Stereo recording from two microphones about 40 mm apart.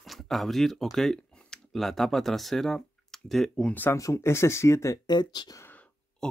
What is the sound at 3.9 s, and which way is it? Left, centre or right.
Speech, left.